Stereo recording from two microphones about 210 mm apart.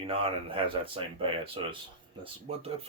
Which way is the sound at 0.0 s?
25° right (ahead or behind).